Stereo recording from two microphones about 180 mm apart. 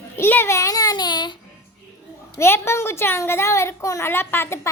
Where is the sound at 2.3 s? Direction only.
15° left (ahead or behind).